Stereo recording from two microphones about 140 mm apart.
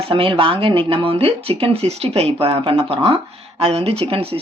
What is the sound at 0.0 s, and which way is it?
Speech, 40° right (ahead or behind).